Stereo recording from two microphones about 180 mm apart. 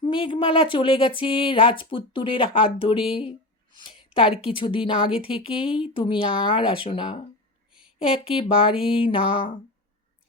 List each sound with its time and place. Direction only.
0.0 s a woman's voice: 25° left (ahead or behind)
7.7 s a sound: 5° right (ahead or behind)
8.1 s a woman's voice: 30° left (ahead or behind)